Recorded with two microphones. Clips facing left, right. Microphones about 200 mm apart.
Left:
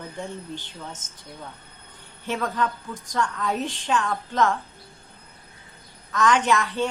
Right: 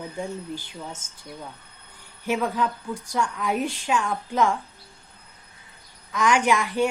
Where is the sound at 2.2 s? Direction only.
10° right (ahead or behind).